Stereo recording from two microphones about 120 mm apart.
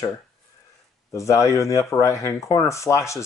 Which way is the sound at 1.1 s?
25° left (ahead or behind).